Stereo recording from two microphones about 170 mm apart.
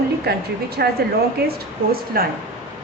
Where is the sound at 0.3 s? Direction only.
65° right (ahead or behind).